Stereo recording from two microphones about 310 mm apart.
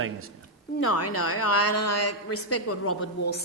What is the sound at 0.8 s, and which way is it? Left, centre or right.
A woman's voice, left.